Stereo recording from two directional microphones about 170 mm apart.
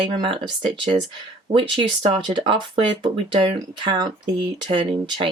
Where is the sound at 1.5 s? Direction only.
30° right (ahead or behind).